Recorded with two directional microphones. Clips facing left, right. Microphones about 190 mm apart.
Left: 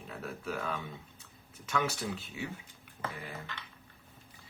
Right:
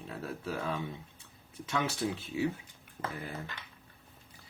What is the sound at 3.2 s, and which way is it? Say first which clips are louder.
Speech: right 3 dB; 40° right (ahead or behind).